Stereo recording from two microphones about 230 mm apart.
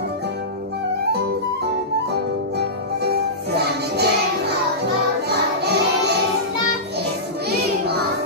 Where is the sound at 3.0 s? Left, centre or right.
Right.